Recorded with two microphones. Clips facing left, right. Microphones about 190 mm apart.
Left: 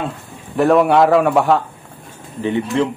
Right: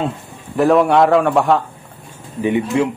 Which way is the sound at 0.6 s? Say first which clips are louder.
Even; centre (ahead or behind).